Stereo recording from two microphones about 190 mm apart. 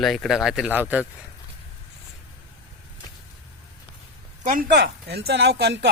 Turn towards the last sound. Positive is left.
turn(degrees=-65)  # may be behind; listen again after turning